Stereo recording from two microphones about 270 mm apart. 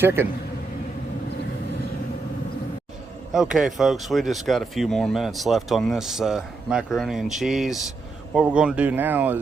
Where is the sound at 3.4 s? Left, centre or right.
Centre.